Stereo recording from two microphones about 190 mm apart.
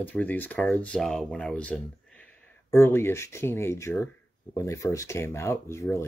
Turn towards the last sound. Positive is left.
turn(degrees=15)  # may be behind; listen again after turning